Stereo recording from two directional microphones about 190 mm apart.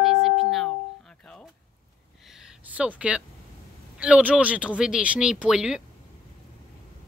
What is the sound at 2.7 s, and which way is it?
Speech, 5° right (ahead or behind).